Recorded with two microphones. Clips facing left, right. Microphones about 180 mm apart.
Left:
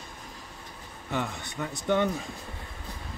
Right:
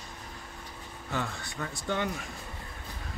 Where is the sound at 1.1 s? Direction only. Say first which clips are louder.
Left 3 dB; 15° left (ahead or behind).